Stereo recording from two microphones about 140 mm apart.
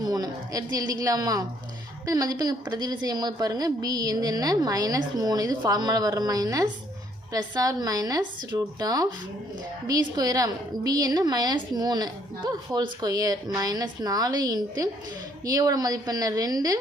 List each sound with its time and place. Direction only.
0.0 s a woman's voice: 25° right (ahead or behind)